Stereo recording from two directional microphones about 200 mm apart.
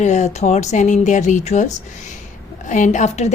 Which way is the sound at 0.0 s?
35° left (ahead or behind).